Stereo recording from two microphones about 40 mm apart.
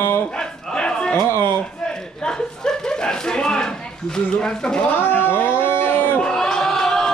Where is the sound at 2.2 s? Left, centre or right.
Centre.